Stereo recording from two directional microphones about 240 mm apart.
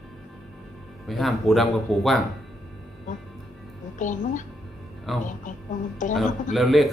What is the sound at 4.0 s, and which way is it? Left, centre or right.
Speech, left.